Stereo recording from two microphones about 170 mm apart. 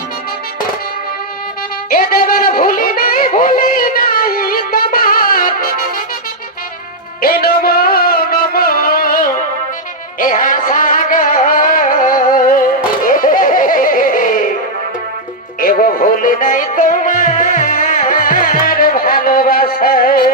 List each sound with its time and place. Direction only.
1.9 s music: 60° left (ahead or behind)
7.2 s music: 60° left (ahead or behind)
15.6 s music: 55° left (ahead or behind)